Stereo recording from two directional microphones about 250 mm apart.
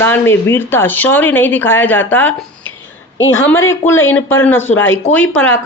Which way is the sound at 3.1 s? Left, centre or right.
Left.